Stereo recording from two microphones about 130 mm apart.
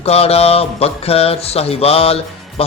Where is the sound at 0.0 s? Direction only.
50° left (ahead or behind).